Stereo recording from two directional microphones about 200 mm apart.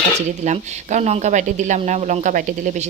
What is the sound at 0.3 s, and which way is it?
Speech, 35° right (ahead or behind).